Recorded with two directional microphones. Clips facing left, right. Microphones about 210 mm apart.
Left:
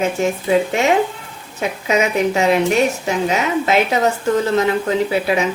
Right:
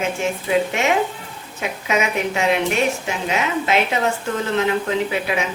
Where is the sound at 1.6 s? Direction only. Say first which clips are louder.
Left 4 dB; 35° left (ahead or behind).